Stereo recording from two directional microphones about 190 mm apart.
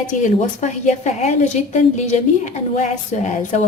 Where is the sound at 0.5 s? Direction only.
35° left (ahead or behind).